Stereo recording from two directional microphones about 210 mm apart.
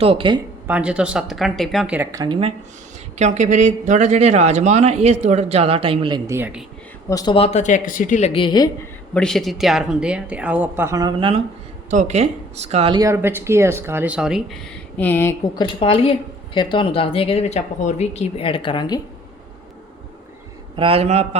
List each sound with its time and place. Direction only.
0.0 s a man's voice: 25° right (ahead or behind)
0.7 s a woman's voice: 5° right (ahead or behind); by 2.5 s 20° right (ahead or behind)
3.2 s a man's voice: 35° right (ahead or behind); by 6.7 s 5° right (ahead or behind)
7.1 s speech: 20° left (ahead or behind)
9.1 s a woman's voice: centre (ahead or behind)
15.6 s speech: 25° left (ahead or behind)
20.7 s a man's voice: 25° right (ahead or behind)